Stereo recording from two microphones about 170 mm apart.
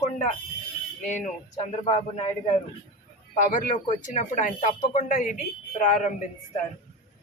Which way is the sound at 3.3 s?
50° left (ahead or behind).